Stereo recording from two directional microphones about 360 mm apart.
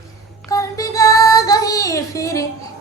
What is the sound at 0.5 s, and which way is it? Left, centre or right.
Child singing, centre.